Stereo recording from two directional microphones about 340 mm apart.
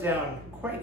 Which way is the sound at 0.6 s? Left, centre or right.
Centre.